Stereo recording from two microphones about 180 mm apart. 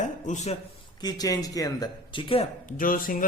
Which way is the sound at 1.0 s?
20° left (ahead or behind).